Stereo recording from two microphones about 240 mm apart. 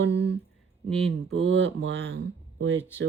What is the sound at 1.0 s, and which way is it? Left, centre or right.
Speech, right.